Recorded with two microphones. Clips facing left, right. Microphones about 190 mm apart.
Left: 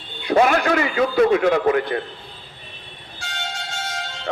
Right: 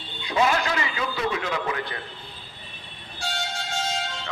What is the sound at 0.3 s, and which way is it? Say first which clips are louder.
A man's voice: left 7 dB; 55° left (ahead or behind).